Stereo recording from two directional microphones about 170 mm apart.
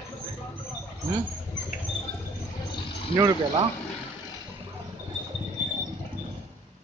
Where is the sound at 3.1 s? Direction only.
30° left (ahead or behind).